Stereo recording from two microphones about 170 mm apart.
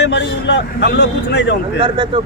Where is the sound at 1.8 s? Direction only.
30° right (ahead or behind).